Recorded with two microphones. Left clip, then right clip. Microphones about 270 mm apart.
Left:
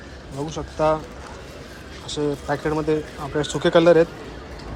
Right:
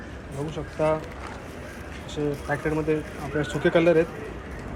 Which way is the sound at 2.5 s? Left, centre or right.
Centre.